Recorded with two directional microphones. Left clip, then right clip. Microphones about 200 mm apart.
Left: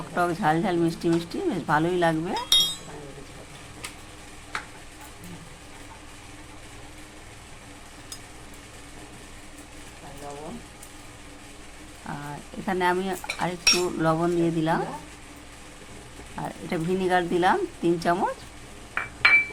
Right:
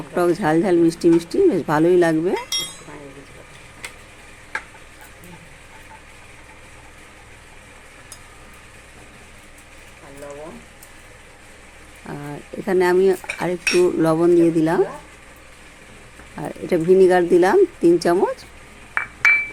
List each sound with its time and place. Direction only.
0.1 s speech: 45° right (ahead or behind)
12.1 s a sound: 40° right (ahead or behind)
12.6 s dishes: 45° right (ahead or behind)
16.4 s speech: 40° right (ahead or behind)